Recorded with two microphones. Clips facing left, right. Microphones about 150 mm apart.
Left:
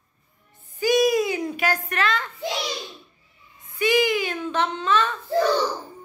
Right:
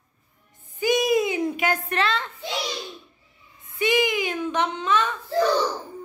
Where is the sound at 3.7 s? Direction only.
20° right (ahead or behind).